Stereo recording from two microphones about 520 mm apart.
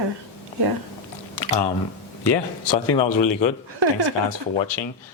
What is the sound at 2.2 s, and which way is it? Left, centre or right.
Speech, left.